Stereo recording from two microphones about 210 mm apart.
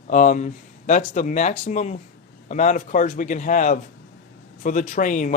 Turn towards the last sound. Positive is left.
turn(degrees=35)  # may be behind; listen again after turning